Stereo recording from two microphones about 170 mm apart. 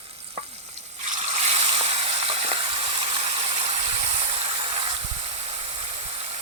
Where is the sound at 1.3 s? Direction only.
35° right (ahead or behind).